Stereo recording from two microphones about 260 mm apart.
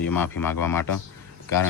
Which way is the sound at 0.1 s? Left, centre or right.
Centre.